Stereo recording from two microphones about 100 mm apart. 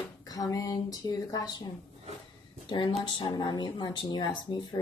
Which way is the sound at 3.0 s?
50° left (ahead or behind).